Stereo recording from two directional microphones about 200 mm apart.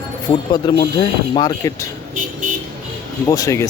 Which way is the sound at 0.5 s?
25° left (ahead or behind).